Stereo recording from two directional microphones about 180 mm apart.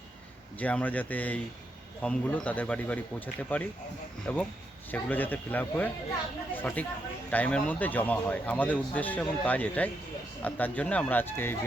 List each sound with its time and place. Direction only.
0.6 s a man's voice: 10° left (ahead or behind)